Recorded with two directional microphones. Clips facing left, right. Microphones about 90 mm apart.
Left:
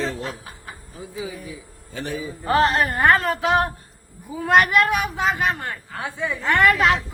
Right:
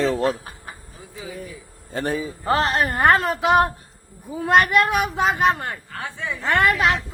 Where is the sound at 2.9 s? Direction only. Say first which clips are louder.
Right 1 dB; 35° right (ahead or behind).